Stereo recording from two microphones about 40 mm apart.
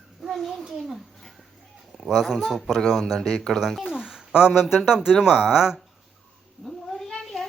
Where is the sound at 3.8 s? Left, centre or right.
Centre.